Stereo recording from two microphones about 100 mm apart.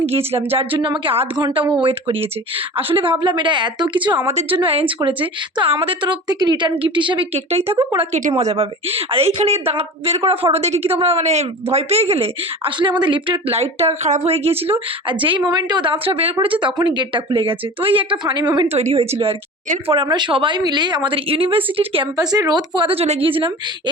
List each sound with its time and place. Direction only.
0.3 s a woman's voice: 70° right (ahead or behind); by 4.2 s 50° right (ahead or behind)
4.5 s a woman's voice: 70° right (ahead or behind)
4.9 s a woman's voice: 55° right (ahead or behind)
7.3 s speech: 90° right
7.8 s a woman's voice: 60° right (ahead or behind); by 15.9 s 45° right (ahead or behind)
15.9 s a woman's voice: 70° right (ahead or behind)
16.4 s a woman's voice: 60° right (ahead or behind)
18.7 s speech: 90° right
20.1 s a woman's voice: 50° right (ahead or behind)
22.2 s a woman's voice: 40° right (ahead or behind); by 23.9 s 60° right (ahead or behind)